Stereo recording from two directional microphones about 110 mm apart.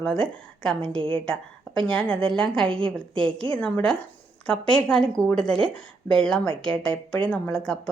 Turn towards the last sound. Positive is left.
turn(degrees=10)  # may be behind; listen again after turning